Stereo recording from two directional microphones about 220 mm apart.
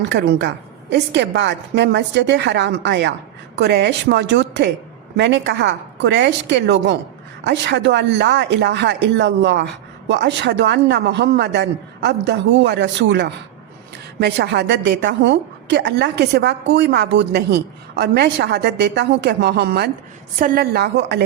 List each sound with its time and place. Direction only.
0.1 s speech: 50° right (ahead or behind)